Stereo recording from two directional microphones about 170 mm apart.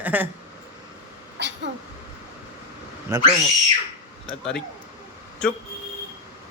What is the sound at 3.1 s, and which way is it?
Speech, 15° right (ahead or behind).